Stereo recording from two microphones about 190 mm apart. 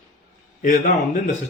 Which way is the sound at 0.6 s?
45° left (ahead or behind).